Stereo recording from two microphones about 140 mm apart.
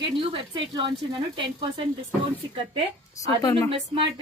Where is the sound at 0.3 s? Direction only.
35° right (ahead or behind).